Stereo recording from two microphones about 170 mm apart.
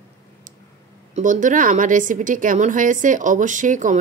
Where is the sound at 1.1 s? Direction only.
50° right (ahead or behind).